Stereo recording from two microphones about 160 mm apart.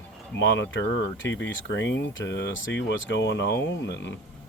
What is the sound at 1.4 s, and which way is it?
Speech, 90° left.